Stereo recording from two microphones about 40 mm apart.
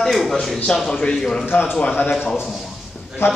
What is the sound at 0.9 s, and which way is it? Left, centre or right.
Speech, centre.